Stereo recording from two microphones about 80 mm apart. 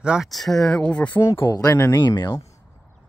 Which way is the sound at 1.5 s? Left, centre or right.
Left.